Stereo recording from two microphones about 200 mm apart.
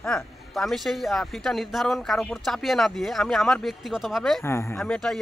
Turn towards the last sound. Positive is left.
turn(degrees=0)  # may be behind; listen again after turning